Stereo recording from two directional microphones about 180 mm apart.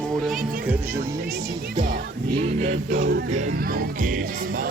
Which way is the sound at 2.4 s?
40° right (ahead or behind).